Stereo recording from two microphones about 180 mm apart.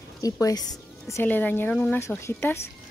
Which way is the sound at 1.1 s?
10° left (ahead or behind).